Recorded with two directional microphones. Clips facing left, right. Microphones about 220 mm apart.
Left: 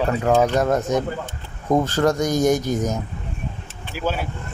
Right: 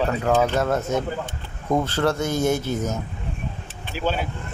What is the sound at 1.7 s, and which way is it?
Speech, 40° left (ahead or behind).